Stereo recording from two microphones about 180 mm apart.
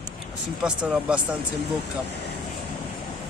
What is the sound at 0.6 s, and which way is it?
Speech, 5° right (ahead or behind).